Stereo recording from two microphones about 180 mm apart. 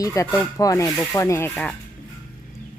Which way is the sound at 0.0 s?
20° left (ahead or behind).